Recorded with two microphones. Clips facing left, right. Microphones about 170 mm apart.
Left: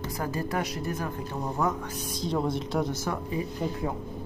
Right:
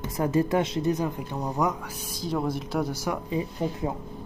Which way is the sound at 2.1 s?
5° right (ahead or behind).